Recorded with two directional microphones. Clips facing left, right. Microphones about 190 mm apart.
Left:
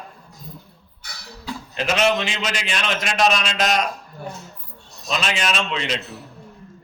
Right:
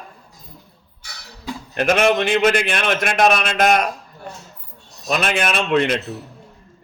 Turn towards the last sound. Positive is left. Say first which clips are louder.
# right 7 dB
turn(degrees=-55)  # may be behind; listen again after turning